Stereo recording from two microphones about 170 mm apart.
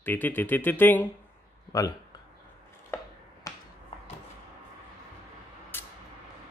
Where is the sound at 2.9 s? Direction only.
15° left (ahead or behind).